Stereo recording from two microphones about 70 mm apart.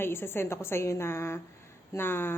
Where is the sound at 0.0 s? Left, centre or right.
Left.